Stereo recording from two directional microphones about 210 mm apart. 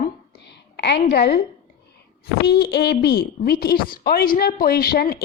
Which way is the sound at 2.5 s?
50° left (ahead or behind).